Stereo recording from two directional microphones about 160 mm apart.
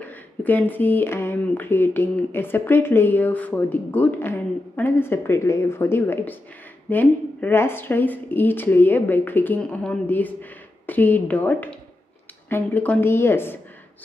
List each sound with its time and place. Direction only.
0.0 s speech: 10° left (ahead or behind)